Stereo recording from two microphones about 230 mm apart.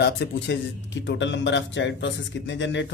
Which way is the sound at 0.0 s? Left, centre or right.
Left.